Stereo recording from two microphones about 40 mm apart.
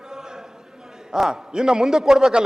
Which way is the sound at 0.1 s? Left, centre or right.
Centre.